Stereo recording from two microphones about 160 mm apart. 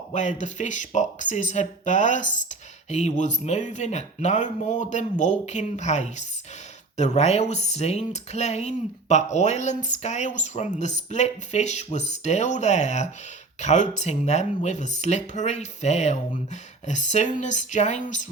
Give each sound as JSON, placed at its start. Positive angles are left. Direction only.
{"t": 0.1, "sound": "speech", "side_deg": 45}